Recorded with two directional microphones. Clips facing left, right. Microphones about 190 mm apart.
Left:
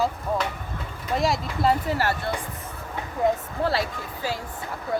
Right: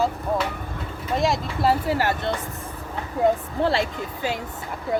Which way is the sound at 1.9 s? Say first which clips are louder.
Right 2 dB; 15° right (ahead or behind).